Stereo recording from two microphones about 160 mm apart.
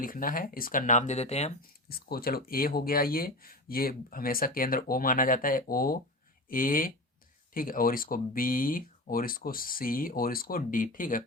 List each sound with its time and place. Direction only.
0.0 s speech: 60° left (ahead or behind); by 1.5 s 45° left (ahead or behind)
1.9 s speech: 75° left (ahead or behind); by 11.2 s 55° left (ahead or behind)